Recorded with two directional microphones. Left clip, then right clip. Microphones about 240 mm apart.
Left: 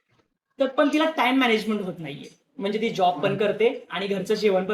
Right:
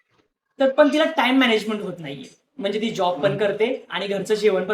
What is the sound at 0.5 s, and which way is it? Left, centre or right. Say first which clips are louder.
Speech: right 5 dB; centre.